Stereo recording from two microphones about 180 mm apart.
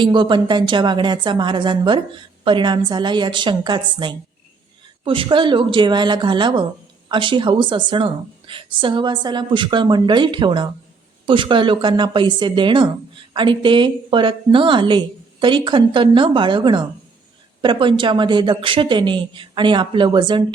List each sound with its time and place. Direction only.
0.0 s a woman's voice: 25° right (ahead or behind)